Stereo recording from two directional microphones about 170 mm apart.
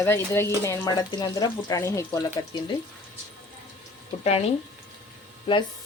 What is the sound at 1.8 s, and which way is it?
Stir, 10° left (ahead or behind).